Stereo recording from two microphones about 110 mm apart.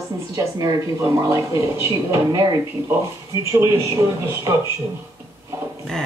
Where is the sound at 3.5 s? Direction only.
25° right (ahead or behind).